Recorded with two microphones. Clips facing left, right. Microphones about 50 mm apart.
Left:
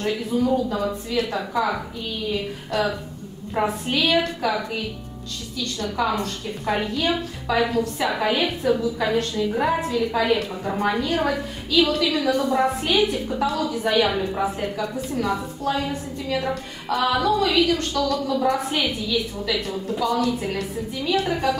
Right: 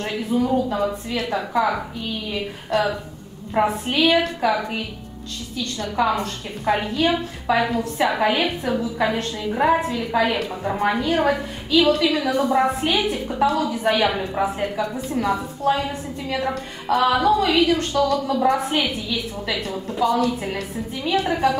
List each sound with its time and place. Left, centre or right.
0.0 s a woman's voice: centre
3.6 s a woman's voice: right
4.0 s a woman's voice: centre
5.8 s a woman's voice: centre
6.1 s a woman's voice: centre
6.9 s a woman's voice: right
12.3 s a woman's voice: centre
12.8 s a woman's voice: right
15.9 s a woman's voice: right
16.4 s a woman's voice: centre
17.9 s a woman's voice: right
18.3 s a woman's voice: centre
19.6 s a woman's voice: centre